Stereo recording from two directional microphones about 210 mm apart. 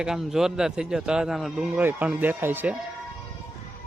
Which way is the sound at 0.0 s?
Centre (ahead or behind).